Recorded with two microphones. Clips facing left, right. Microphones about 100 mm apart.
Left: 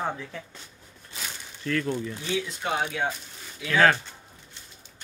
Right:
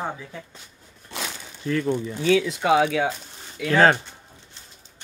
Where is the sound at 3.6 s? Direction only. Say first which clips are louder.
Right 6 dB; 65° right (ahead or behind).